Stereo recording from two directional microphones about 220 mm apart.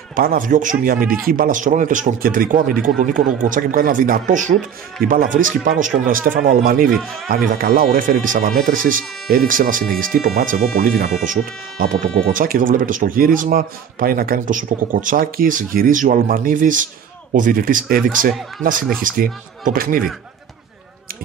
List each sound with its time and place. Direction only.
0.1 s speech: 40° right (ahead or behind)